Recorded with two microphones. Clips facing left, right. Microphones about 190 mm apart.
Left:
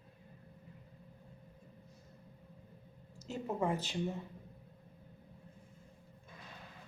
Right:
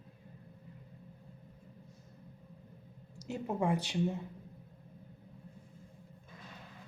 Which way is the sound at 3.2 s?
15° right (ahead or behind).